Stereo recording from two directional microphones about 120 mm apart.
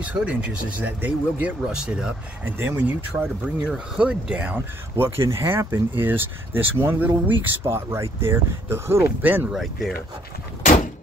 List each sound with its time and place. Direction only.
0.0 s speech: 10° right (ahead or behind)
2.4 s speech: 15° right (ahead or behind)
3.1 s speech: 40° right (ahead or behind)
3.6 s speech: 5° right (ahead or behind)
9.5 s speech: centre (ahead or behind)